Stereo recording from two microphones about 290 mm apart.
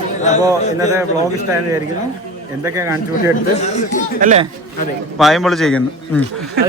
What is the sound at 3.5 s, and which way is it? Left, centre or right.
Speech, left.